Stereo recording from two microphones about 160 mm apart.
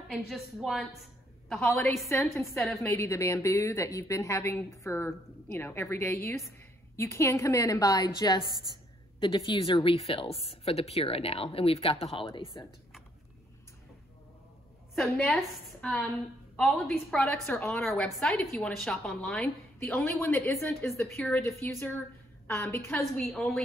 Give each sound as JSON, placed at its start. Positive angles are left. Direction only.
{"t": 0.3, "sound": "a woman's voice", "side_deg": 0}
{"t": 2.0, "sound": "a woman's voice", "side_deg": 15}
{"t": 8.5, "sound": "a woman's voice", "side_deg": -25}
{"t": 9.2, "sound": "a woman's voice", "side_deg": 30}
{"t": 15.0, "sound": "a woman's voice", "side_deg": 0}
{"t": 22.8, "sound": "a woman's voice", "side_deg": 5}